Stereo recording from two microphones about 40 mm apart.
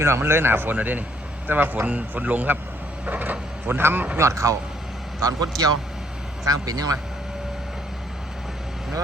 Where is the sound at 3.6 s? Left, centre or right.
Right.